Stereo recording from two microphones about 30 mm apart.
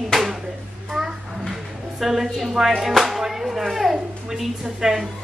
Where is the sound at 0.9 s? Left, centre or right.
Centre.